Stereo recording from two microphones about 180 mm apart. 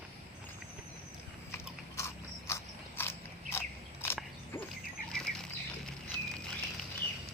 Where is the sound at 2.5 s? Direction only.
15° left (ahead or behind).